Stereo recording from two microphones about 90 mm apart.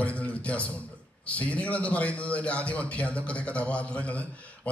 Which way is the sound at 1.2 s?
15° left (ahead or behind).